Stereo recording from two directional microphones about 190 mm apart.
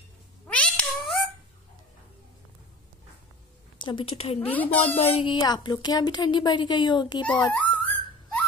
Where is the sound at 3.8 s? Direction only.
25° left (ahead or behind).